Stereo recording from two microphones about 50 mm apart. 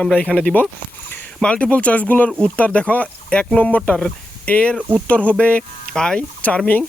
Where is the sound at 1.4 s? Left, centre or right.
Left.